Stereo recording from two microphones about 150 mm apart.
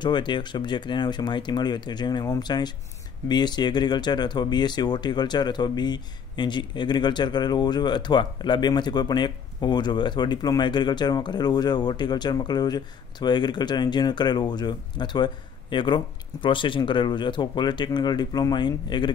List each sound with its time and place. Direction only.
0.0 s speech: 30° left (ahead or behind)